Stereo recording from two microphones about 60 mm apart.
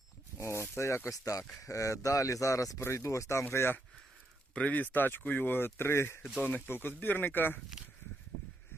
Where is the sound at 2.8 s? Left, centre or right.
Left.